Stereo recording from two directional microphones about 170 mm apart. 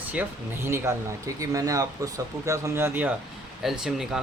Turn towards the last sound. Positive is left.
turn(degrees=-5)  # may be behind; listen again after turning